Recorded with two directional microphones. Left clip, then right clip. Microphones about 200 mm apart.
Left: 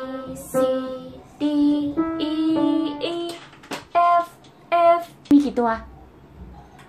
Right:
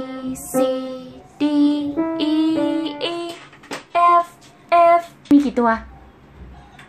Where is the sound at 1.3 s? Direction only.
50° right (ahead or behind).